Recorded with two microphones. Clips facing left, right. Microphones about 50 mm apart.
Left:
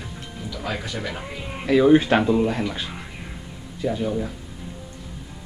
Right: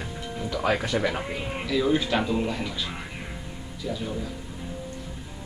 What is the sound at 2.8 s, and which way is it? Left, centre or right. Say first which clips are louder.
Music: even; centre.